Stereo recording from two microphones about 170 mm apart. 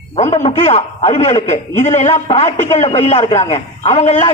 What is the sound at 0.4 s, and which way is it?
A man's voice, 35° left (ahead or behind).